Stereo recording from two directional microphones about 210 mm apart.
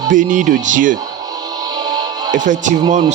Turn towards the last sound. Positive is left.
turn(degrees=-35)  # may be behind; listen again after turning